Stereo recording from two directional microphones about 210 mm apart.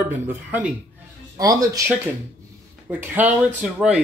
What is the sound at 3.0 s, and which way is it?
Speech, 10° right (ahead or behind).